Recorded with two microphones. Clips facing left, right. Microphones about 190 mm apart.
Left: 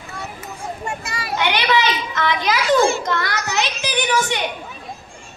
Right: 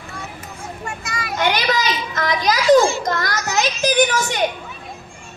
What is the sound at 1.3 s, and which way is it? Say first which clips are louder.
Children playing: left 1 dB; 45° right (ahead or behind).